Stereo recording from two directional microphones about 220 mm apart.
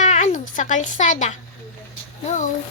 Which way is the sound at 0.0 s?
35° left (ahead or behind).